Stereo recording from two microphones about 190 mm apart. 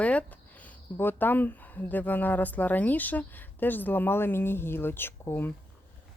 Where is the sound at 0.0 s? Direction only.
5° left (ahead or behind).